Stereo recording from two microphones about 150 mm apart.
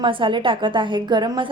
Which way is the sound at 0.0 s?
35° right (ahead or behind).